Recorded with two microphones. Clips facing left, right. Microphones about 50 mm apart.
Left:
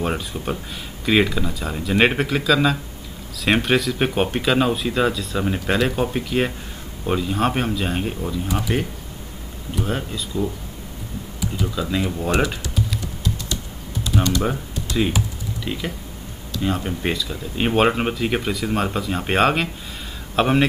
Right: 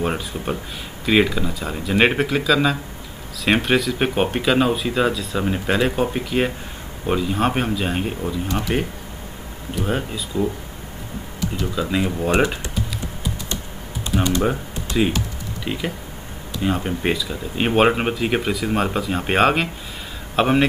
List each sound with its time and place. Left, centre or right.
0.0 s speech: centre
8.5 s speech: centre
9.8 s speech: centre
11.5 s speech: centre
12.3 s speech: right
14.1 s typing: centre
14.9 s speech: centre